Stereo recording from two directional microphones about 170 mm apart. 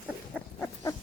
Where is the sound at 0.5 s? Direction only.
15° left (ahead or behind).